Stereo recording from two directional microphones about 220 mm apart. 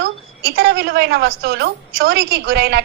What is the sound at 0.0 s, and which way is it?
A woman's voice, 45° right (ahead or behind).